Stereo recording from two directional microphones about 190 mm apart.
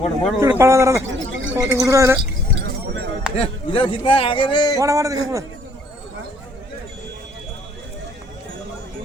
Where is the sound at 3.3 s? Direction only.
30° left (ahead or behind).